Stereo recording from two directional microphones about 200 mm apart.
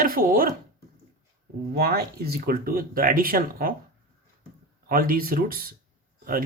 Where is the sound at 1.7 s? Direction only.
50° right (ahead or behind).